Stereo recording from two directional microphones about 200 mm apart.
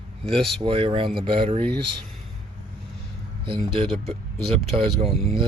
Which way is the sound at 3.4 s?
25° right (ahead or behind).